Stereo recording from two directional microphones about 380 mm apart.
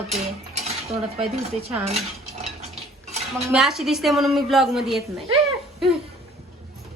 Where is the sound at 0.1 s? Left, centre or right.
Centre.